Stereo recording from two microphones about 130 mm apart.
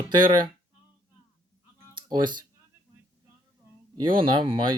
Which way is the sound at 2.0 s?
35° right (ahead or behind).